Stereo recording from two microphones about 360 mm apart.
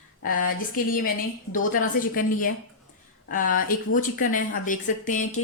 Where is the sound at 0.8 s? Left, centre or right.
Left.